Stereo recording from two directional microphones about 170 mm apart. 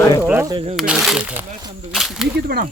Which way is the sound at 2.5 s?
70° right (ahead or behind).